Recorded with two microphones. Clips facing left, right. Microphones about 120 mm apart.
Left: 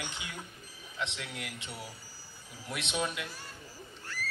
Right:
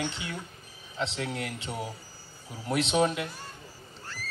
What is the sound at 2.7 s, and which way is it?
Speech, 35° right (ahead or behind).